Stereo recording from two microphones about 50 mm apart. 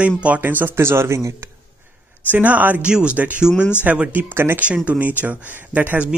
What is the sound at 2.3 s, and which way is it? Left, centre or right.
Speech, right.